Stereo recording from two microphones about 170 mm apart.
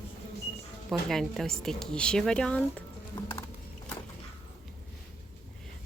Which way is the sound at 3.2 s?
25° left (ahead or behind).